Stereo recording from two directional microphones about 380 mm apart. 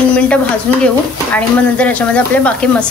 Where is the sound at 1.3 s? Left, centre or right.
Centre.